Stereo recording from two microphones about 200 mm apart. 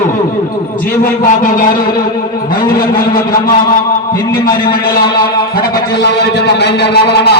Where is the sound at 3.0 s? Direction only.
45° left (ahead or behind).